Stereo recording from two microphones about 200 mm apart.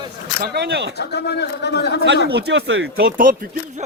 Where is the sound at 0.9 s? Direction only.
55° left (ahead or behind).